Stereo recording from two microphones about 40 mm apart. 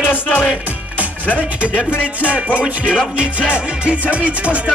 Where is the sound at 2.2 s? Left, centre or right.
Right.